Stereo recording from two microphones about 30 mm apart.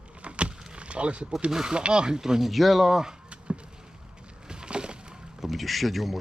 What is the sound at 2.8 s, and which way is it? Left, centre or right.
Speech, centre.